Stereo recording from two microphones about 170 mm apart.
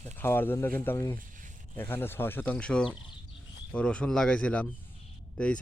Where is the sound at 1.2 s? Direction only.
50° right (ahead or behind).